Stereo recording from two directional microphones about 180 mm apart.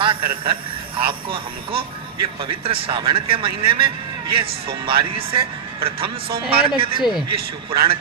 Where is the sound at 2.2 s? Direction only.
30° right (ahead or behind).